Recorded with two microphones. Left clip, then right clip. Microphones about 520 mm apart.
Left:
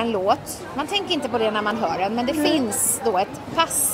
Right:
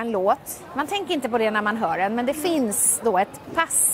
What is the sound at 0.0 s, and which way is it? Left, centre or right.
A woman's voice, right.